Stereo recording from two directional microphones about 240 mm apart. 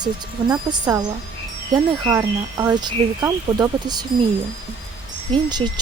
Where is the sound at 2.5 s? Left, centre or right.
Centre.